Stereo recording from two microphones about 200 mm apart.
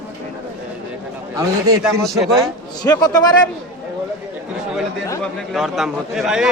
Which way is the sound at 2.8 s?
20° left (ahead or behind).